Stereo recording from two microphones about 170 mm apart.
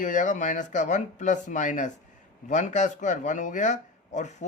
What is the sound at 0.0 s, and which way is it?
Speech, 50° left (ahead or behind).